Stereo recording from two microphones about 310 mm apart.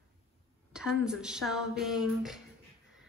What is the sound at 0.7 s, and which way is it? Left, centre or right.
A woman's voice, centre.